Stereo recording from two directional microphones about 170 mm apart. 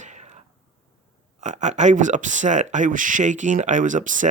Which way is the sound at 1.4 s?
45° right (ahead or behind).